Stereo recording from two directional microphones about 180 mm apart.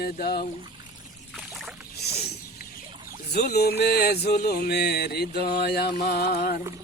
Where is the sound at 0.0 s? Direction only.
60° left (ahead or behind).